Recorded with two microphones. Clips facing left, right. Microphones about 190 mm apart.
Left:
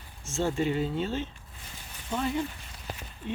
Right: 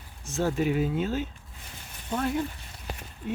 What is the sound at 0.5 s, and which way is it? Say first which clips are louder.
Speech: right 2 dB; 5° right (ahead or behind).